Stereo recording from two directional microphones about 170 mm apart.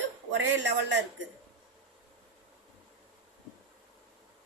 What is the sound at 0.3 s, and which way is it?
Speech, 90° right.